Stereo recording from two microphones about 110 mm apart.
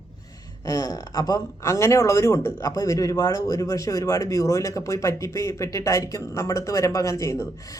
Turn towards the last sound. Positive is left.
turn(degrees=25)  # may be behind; listen again after turning